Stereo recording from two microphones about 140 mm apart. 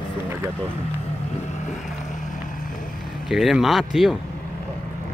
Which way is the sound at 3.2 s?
Centre (ahead or behind).